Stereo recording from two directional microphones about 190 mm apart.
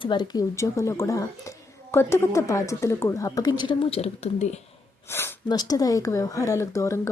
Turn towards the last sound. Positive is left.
turn(degrees=15)  # may be behind; listen again after turning